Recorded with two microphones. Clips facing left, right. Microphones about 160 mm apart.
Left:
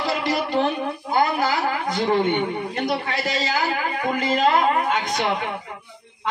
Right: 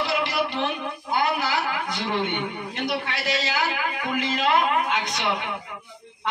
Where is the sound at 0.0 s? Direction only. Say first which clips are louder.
Left 2 dB; 45° left (ahead or behind).